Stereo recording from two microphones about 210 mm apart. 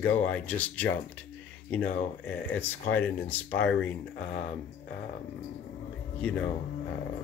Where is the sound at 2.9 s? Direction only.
10° left (ahead or behind).